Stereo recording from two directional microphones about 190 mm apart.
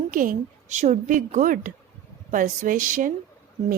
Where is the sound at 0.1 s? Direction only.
45° right (ahead or behind).